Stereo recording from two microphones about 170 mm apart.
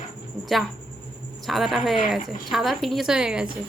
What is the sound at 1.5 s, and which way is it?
A woman's voice, centre (ahead or behind).